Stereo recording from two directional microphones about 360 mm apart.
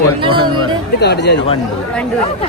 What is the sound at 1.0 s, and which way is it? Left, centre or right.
Speech, left.